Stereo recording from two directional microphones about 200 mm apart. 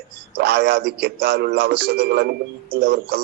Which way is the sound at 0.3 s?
55° right (ahead or behind).